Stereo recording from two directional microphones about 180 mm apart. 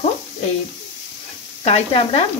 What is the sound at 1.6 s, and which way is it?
Speech, 35° left (ahead or behind).